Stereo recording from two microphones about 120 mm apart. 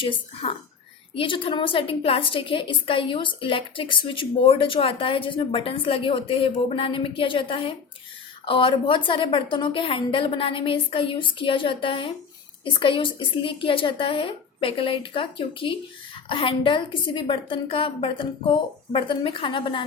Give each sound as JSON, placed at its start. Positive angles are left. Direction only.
{"t": 0.0, "sound": "a woman's voice", "side_deg": 50}